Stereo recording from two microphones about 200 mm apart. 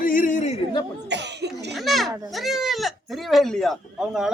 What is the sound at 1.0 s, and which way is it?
Cough, 60° right (ahead or behind).